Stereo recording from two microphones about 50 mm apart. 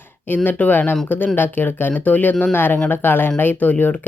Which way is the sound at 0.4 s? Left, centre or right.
Left.